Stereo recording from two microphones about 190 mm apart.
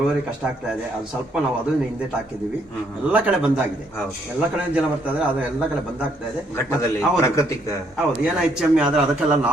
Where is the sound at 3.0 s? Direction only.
5° right (ahead or behind).